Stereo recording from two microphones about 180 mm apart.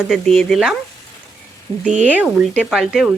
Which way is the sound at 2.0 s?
5° right (ahead or behind).